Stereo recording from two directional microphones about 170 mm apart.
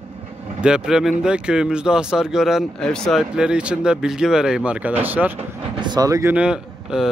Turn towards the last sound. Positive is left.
turn(degrees=-5)  # may be behind; listen again after turning